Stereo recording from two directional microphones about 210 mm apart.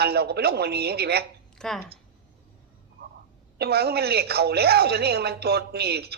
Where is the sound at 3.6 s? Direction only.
50° right (ahead or behind).